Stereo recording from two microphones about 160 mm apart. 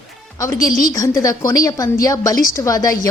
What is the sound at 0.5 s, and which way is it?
Speech, 60° left (ahead or behind).